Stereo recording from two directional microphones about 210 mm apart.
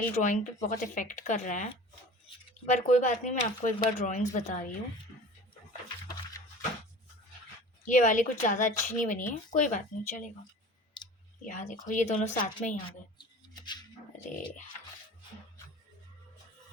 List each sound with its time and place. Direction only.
0.1 s speech: 35° left (ahead or behind)
7.9 s speech: 40° left (ahead or behind)
11.0 s clicking: 20° left (ahead or behind)
11.4 s speech: 35° left (ahead or behind)
13.1 s rub: 20° left (ahead or behind)